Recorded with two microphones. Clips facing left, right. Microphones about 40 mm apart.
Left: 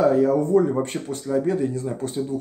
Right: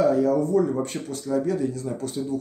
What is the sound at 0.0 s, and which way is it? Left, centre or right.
Speech, left.